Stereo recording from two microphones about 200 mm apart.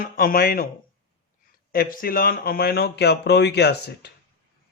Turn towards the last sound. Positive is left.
turn(degrees=55)  # may be behind; listen again after turning